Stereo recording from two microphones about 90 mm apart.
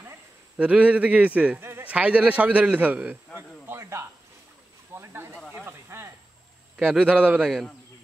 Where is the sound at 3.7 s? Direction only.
30° right (ahead or behind).